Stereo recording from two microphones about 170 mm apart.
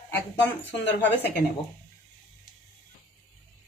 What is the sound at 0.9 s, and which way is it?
Speech, 90° left.